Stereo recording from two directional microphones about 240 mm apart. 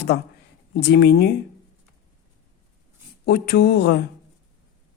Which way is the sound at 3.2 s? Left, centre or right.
Left.